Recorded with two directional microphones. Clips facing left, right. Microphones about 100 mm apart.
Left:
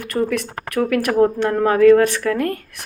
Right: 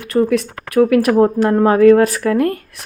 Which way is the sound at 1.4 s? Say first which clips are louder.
Right 3 dB; 25° right (ahead or behind).